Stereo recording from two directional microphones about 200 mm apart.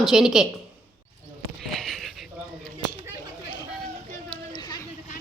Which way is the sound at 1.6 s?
Centre (ahead or behind).